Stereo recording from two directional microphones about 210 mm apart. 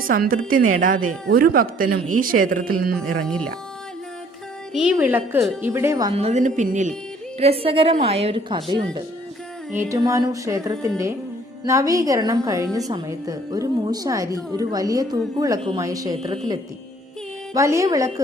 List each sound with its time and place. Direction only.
0.0 s speech: 45° right (ahead or behind)
4.7 s a woman's voice: 5° right (ahead or behind)
6.1 s a woman's voice: 30° right (ahead or behind)
17.5 s a woman's voice: 15° right (ahead or behind)